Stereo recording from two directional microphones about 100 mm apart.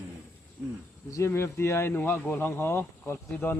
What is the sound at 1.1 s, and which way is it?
A child's voice, 30° left (ahead or behind).